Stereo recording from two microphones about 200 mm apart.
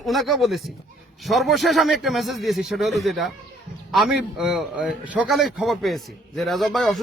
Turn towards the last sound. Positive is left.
turn(degrees=0)  # may be behind; listen again after turning